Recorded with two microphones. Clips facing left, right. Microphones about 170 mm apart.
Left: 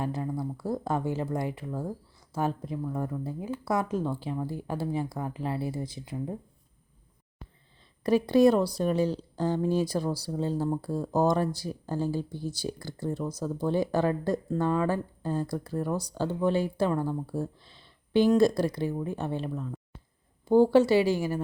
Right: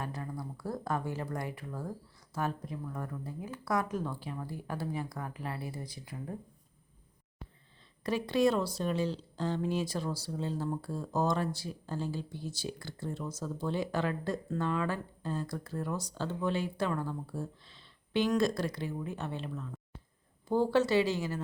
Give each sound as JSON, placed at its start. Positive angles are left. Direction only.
{"t": 0.0, "sound": "speech", "side_deg": 25}
{"t": 8.0, "sound": "speech", "side_deg": 35}